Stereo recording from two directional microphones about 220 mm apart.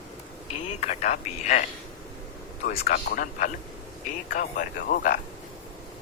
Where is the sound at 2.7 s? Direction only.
40° left (ahead or behind).